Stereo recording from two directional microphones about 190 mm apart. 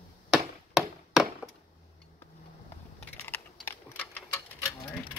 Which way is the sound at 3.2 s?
10° left (ahead or behind).